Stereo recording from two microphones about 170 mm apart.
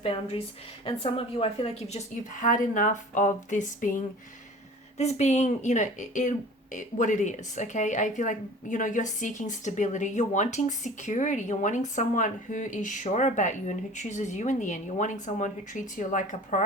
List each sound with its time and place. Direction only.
0.0 s a woman's voice: 35° left (ahead or behind)
2.3 s speech: 50° left (ahead or behind)